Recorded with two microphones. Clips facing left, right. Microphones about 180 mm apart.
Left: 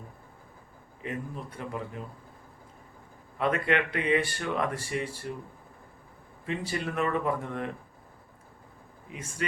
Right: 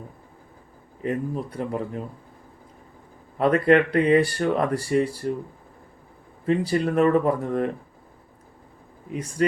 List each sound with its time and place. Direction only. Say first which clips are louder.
1.0 s speech: right 9 dB; 40° right (ahead or behind)
3.3 s speech: right 9 dB; 40° right (ahead or behind)
6.4 s speech: right 10 dB; 40° right (ahead or behind)